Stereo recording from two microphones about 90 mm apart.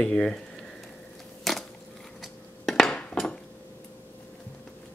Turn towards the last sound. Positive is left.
turn(degrees=5)  # may be behind; listen again after turning